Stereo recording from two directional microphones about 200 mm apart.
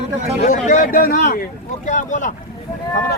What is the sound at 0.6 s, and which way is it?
Speech, 40° left (ahead or behind).